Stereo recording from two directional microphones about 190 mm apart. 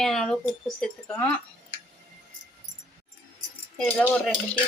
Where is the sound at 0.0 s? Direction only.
Centre (ahead or behind).